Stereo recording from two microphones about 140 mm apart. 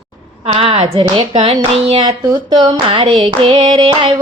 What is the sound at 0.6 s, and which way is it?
Female singing, 40° right (ahead or behind).